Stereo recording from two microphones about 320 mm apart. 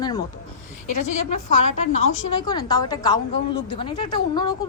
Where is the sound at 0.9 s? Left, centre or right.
Left.